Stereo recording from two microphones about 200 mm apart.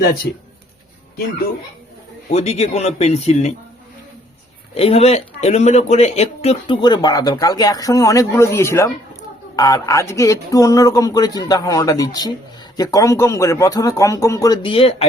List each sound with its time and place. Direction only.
2.3 s speech: 35° left (ahead or behind)
4.7 s speech: 30° left (ahead or behind)